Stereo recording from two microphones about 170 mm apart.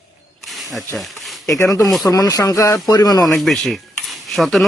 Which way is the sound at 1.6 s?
20° left (ahead or behind).